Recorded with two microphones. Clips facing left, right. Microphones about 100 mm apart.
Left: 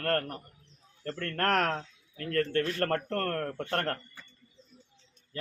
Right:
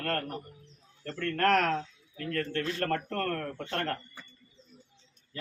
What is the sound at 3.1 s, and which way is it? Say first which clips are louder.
Speech: left 1 dB; 45° left (ahead or behind).